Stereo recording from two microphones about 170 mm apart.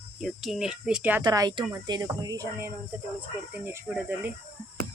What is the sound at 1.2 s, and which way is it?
Speech, 25° right (ahead or behind).